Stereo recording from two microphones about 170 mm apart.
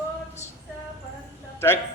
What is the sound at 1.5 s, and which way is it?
Speech, 15° left (ahead or behind).